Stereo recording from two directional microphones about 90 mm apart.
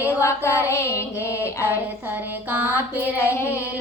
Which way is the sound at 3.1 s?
30° left (ahead or behind).